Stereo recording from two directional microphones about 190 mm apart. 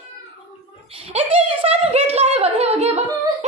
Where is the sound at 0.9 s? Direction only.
30° right (ahead or behind).